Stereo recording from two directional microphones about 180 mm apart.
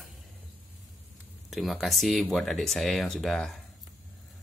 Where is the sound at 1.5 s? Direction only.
Centre (ahead or behind).